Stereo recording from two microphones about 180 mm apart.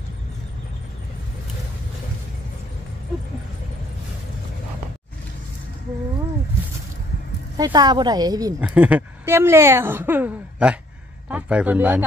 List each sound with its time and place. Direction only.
7.5 s speech: 20° right (ahead or behind)
8.5 s a woman's voice: 10° right (ahead or behind)